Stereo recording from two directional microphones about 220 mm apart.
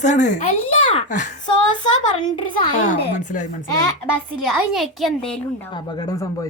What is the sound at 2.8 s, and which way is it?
Speech, 35° left (ahead or behind).